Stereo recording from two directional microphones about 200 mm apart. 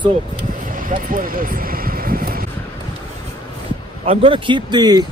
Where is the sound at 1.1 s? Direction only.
45° right (ahead or behind).